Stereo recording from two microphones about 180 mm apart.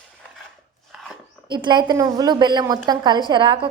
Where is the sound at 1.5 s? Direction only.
25° right (ahead or behind).